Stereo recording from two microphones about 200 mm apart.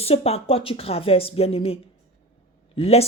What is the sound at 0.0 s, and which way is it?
Speech, 30° left (ahead or behind).